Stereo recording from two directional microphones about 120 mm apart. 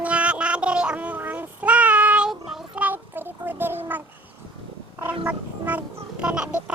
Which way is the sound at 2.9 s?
15° right (ahead or behind).